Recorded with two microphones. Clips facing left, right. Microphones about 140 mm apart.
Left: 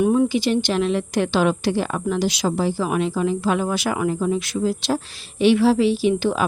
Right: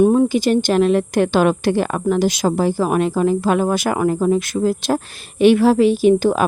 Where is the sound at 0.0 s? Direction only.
35° right (ahead or behind).